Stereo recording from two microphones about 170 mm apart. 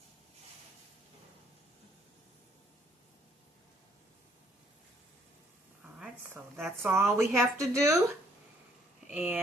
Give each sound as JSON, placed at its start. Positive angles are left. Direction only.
{"t": 6.6, "sound": "speech", "side_deg": -15}
{"t": 9.1, "sound": "speech", "side_deg": -10}